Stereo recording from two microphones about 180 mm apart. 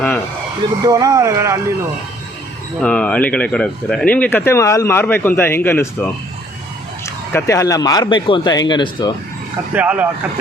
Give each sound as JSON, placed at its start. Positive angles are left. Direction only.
{"t": 0.9, "sound": "speech", "side_deg": -20}
{"t": 2.8, "sound": "speech", "side_deg": 5}
{"t": 9.7, "sound": "speech", "side_deg": -10}